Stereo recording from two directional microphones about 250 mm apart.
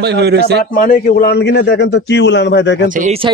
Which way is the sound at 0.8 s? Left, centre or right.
Left.